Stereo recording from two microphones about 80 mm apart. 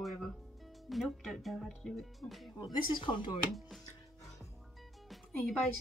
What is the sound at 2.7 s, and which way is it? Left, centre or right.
Speech, left.